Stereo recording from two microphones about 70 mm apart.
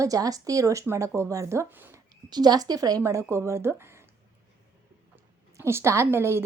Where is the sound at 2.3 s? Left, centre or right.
Right.